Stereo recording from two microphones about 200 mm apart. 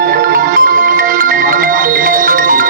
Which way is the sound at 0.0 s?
45° right (ahead or behind).